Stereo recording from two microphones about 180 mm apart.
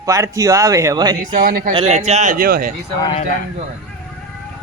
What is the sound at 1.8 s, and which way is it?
Speech, 40° right (ahead or behind).